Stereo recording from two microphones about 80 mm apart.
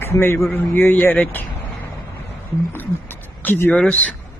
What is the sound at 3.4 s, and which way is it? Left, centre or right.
Speech, left.